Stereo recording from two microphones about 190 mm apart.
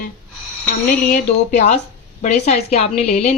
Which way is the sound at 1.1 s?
40° left (ahead or behind).